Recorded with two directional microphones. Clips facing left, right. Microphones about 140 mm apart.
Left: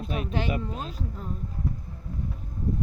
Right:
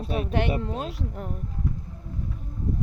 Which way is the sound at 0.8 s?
70° right (ahead or behind).